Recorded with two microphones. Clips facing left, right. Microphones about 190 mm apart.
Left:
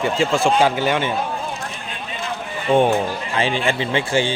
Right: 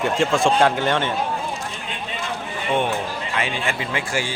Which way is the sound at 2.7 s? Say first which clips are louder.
Left 7 dB; 30° left (ahead or behind).